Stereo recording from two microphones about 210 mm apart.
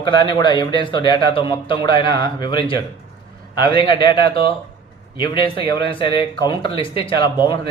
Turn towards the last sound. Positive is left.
turn(degrees=25)  # may be behind; listen again after turning